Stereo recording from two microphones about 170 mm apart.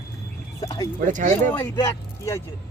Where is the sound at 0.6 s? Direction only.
20° left (ahead or behind).